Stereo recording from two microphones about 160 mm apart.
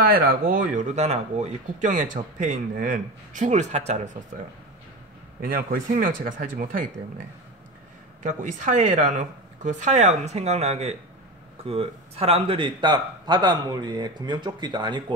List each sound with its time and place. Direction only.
0.0 s speech: 65° right (ahead or behind); by 4.2 s 50° right (ahead or behind)
5.4 s speech: 65° right (ahead or behind)
8.2 s speech: 50° right (ahead or behind); by 15.1 s 30° right (ahead or behind)